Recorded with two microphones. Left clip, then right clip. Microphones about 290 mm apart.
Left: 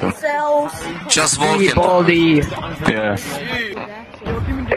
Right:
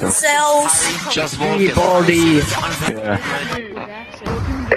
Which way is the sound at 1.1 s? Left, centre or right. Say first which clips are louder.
Left 7 dB; left.